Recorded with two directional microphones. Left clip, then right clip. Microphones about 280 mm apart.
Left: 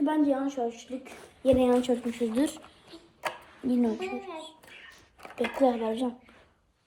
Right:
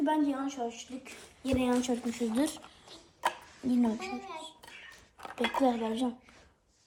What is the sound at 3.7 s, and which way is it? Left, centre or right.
Speech, right.